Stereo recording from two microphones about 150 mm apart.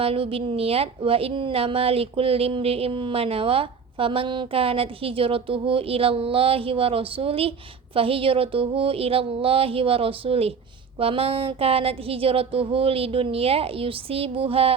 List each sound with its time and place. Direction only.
0.0 s a woman's voice: 40° right (ahead or behind)